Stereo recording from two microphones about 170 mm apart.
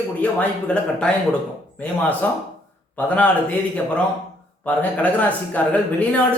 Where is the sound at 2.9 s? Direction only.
10° left (ahead or behind).